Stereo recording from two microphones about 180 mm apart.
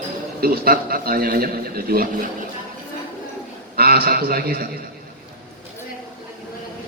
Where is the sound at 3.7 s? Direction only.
55° right (ahead or behind).